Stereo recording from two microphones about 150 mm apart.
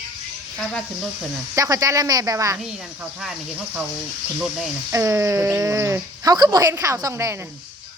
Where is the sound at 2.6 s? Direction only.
5° right (ahead or behind).